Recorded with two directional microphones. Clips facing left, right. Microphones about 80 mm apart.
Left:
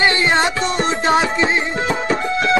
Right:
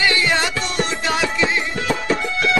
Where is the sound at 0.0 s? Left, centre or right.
Left.